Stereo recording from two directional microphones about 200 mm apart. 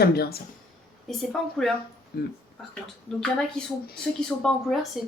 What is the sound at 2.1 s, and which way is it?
Speech, 50° left (ahead or behind).